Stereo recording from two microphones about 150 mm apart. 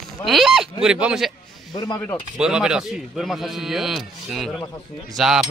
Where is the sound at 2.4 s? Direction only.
5° right (ahead or behind).